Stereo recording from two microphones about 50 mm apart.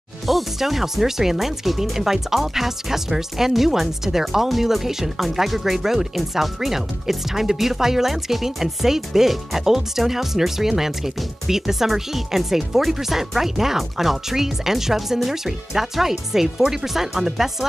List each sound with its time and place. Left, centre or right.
0.3 s speech: centre